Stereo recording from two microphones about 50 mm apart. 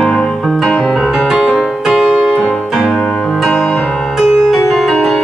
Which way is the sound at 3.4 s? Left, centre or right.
Centre.